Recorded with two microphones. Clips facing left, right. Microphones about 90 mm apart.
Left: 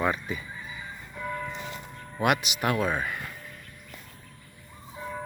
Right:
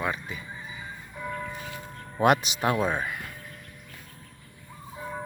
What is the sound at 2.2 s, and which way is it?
Speech, 35° right (ahead or behind).